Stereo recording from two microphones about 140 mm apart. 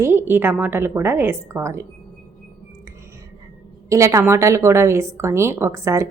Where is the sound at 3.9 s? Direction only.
20° right (ahead or behind).